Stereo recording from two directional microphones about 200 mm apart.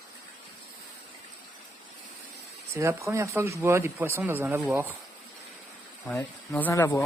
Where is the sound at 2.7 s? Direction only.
15° right (ahead or behind).